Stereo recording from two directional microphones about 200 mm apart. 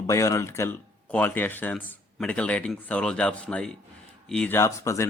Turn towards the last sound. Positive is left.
turn(degrees=15)  # may be behind; listen again after turning